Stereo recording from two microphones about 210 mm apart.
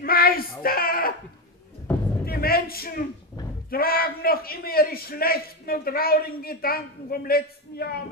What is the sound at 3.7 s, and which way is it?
A man's voice, 45° left (ahead or behind).